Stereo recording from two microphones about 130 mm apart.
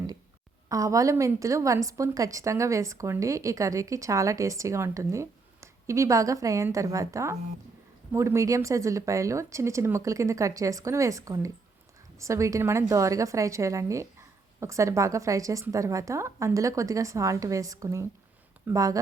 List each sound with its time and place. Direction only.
0.7 s a woman's voice: 25° right (ahead or behind)